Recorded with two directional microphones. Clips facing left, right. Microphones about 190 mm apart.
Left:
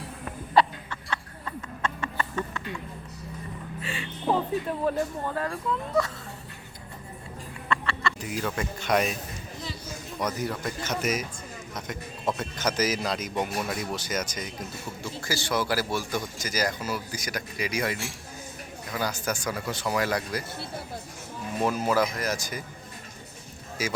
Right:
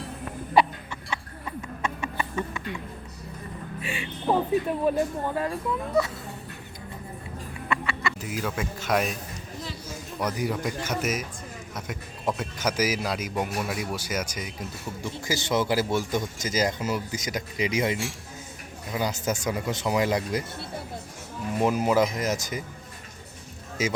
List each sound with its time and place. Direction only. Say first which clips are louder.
0.5 s a sound: right 1 dB; 10° right (ahead or behind)
3.8 s speech: right 1 dB; 15° right (ahead or behind)
7.7 s speech: even; 10° right (ahead or behind)
10.2 s a man's voice: right 2 dB; 10° right (ahead or behind)
21.6 s a man's voice: right 3 dB; 15° right (ahead or behind)
23.8 s a man's voice: right 3 dB; 20° right (ahead or behind)